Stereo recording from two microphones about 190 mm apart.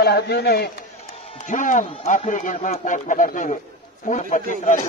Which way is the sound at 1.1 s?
35° left (ahead or behind).